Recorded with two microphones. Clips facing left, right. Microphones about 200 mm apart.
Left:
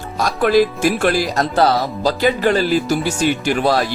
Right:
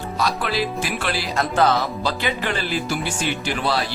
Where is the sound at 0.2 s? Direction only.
50° left (ahead or behind).